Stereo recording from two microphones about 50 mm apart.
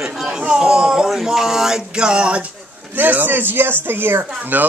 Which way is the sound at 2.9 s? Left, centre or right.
Right.